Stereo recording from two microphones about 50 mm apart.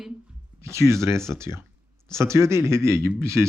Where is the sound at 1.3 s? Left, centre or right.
Right.